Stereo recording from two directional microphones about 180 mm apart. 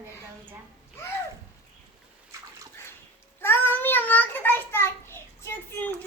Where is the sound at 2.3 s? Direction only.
15° right (ahead or behind).